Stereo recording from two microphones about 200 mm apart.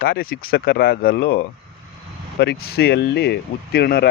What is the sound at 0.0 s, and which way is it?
Speech, 50° left (ahead or behind).